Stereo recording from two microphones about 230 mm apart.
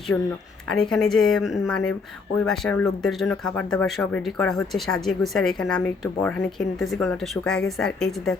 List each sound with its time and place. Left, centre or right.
0.7 s speech: centre